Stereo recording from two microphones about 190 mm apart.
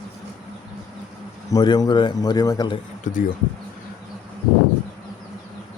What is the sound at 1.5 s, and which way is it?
Speech, 20° left (ahead or behind).